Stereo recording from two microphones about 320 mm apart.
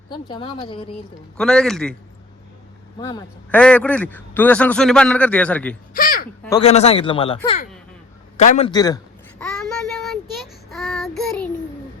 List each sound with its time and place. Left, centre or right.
0.1 s speech: centre
1.4 s a man's voice: centre
3.0 s a man's voice: centre
5.9 s a sound: left
6.6 s speech: centre
9.4 s child singing: centre